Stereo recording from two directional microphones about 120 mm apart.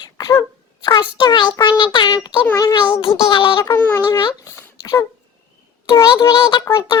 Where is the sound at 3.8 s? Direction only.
15° left (ahead or behind).